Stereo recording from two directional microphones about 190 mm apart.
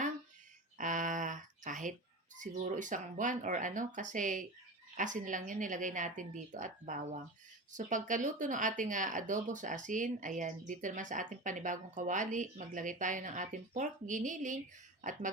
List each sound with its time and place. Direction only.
0.8 s speech: 45° right (ahead or behind)